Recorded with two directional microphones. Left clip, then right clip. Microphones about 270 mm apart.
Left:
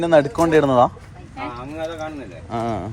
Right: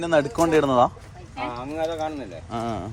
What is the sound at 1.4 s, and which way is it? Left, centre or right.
Clip-clop, right.